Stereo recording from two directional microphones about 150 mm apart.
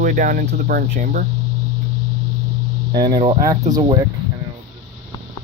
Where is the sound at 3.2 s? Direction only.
40° right (ahead or behind).